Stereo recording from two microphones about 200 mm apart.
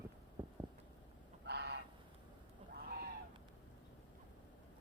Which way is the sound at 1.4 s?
55° right (ahead or behind).